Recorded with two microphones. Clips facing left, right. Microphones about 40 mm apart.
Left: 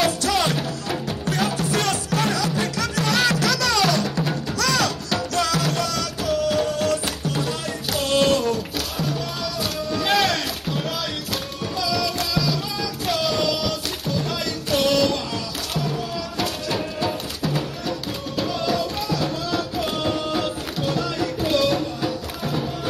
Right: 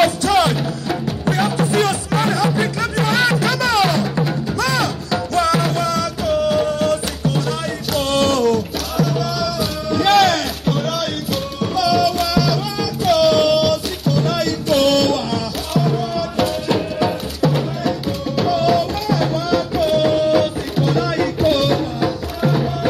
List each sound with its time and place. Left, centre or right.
0.0 s music: right
0.6 s music: centre
1.2 s music: right
8.1 s music: right
11.7 s a sound: right
13.0 s music: right
15.0 s music: right
18.4 s music: right